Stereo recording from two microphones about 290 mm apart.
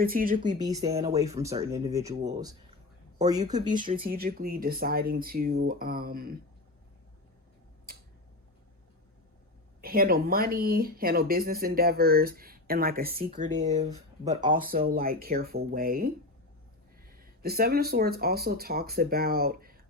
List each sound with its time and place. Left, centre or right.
0.0 s speech: right
0.6 s speech: centre
4.0 s speech: right
9.8 s speech: right
13.5 s speech: centre
14.4 s speech: right